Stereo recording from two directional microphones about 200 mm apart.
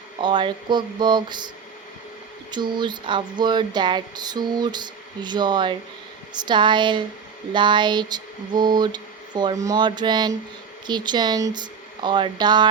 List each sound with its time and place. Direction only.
0.2 s speech: 25° right (ahead or behind)
2.5 s speech: 20° right (ahead or behind)